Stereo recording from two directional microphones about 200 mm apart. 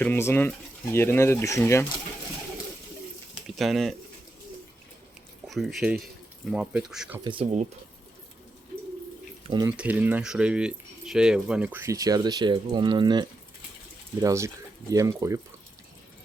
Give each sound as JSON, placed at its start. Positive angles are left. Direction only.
{"t": 0.0, "sound": "speech", "side_deg": 10}
{"t": 3.4, "sound": "speech", "side_deg": 0}
{"t": 5.5, "sound": "speech", "side_deg": 0}
{"t": 7.3, "sound": "speech", "side_deg": -30}
{"t": 9.5, "sound": "speech", "side_deg": -20}
{"t": 9.7, "sound": "speech", "side_deg": -10}